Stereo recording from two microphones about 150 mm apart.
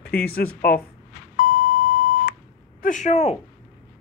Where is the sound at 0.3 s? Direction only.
90° left.